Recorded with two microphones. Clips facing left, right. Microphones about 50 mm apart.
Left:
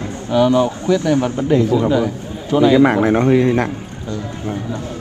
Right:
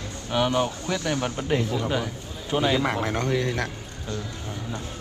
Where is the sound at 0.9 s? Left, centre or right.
Left.